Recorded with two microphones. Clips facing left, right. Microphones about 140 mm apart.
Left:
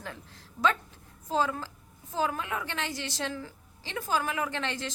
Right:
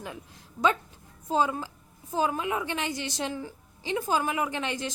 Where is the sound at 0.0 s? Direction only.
15° right (ahead or behind).